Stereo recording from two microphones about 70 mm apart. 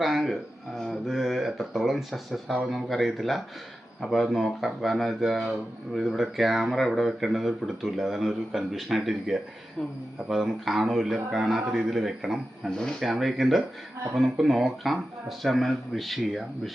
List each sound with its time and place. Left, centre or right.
0.0 s a sound: centre
0.9 s speech: centre
12.7 s speech: centre